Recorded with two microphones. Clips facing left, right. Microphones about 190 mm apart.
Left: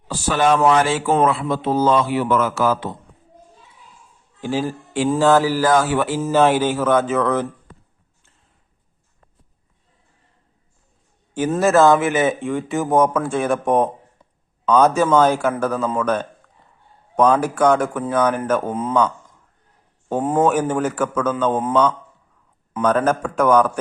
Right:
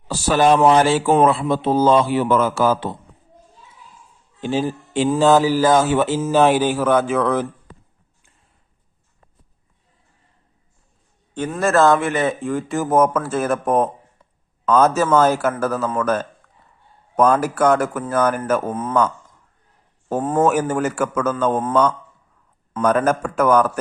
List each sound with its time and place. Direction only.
0.1 s a man's voice: 35° right (ahead or behind)
4.4 s a man's voice: 20° right (ahead or behind)
11.6 s speech: centre (ahead or behind)
18.7 s a man's voice: 10° left (ahead or behind)
20.1 s a man's voice: 10° left (ahead or behind)
20.4 s speech: 10° right (ahead or behind)